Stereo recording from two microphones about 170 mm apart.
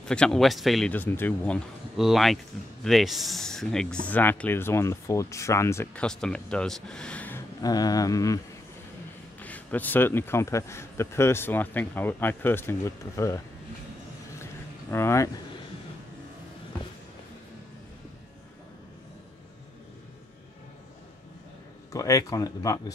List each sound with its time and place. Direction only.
0.0 s speech: 5° left (ahead or behind)
6.0 s speech: 5° left (ahead or behind)
7.6 s speech: 20° left (ahead or behind)
9.4 s speech: 10° left (ahead or behind)
14.4 s a sound: 15° left (ahead or behind)
21.9 s speech: 20° left (ahead or behind)